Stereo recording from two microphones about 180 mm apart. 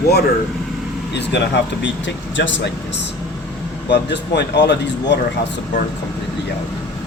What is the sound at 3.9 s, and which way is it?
Speech, 70° left (ahead or behind).